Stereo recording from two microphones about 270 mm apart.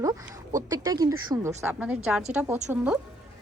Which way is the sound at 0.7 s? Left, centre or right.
Centre.